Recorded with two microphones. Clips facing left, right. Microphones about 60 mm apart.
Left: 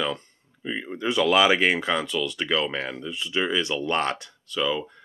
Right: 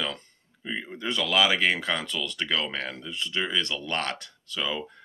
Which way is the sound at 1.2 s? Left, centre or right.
Left.